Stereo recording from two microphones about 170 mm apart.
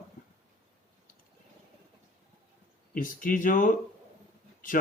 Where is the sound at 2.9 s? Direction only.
55° left (ahead or behind).